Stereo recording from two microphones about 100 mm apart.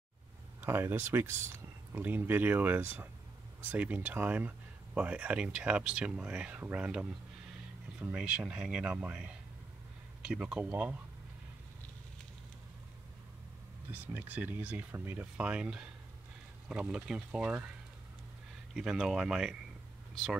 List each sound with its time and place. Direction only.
0.6 s speech: 25° right (ahead or behind)
14.0 s speech: 20° right (ahead or behind)
18.8 s speech: 5° right (ahead or behind)